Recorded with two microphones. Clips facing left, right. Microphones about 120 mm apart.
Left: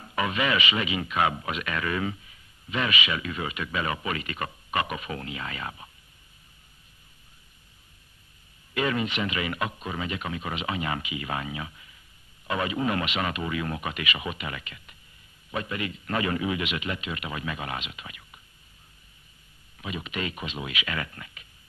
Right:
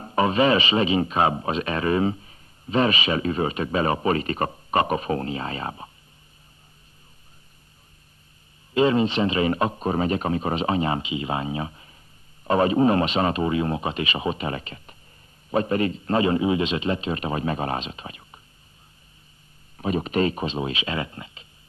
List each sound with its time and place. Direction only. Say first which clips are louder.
0.0 s a man's voice: right 8 dB; 35° right (ahead or behind)
8.7 s a man's voice: right 8 dB; 30° right (ahead or behind)
19.8 s a man's voice: right 11 dB; 40° right (ahead or behind)